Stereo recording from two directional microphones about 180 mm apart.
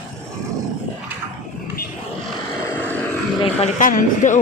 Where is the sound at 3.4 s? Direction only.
40° left (ahead or behind).